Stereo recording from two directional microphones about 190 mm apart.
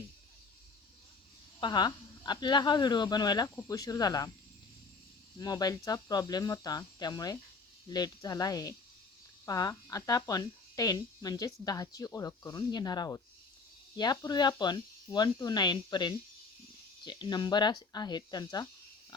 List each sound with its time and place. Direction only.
1.6 s speech: 20° left (ahead or behind)
5.4 s speech: 20° left (ahead or behind)